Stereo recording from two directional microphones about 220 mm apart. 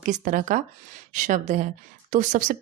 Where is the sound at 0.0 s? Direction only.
35° right (ahead or behind).